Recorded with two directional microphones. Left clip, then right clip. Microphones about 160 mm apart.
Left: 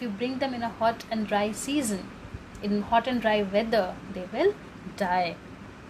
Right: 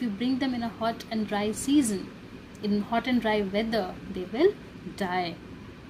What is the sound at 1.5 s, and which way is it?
Speech, 40° left (ahead or behind).